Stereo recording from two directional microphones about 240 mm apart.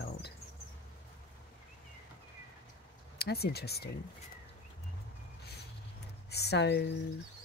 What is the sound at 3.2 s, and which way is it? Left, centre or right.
Speech, left.